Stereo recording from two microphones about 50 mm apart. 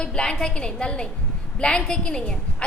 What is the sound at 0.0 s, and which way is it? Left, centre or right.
A woman's voice, centre.